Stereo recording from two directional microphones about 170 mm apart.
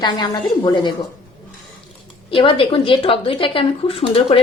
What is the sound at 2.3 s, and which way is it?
Speech, 30° left (ahead or behind).